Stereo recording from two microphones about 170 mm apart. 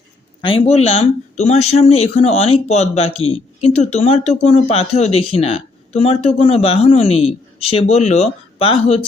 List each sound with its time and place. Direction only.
0.4 s speech: 35° left (ahead or behind)